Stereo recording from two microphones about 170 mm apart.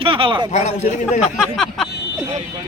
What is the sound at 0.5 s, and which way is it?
Speech, 40° left (ahead or behind).